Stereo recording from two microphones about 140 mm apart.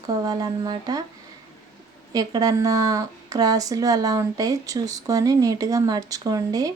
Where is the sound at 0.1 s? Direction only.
25° right (ahead or behind).